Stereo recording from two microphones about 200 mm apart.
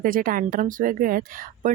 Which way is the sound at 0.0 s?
45° right (ahead or behind).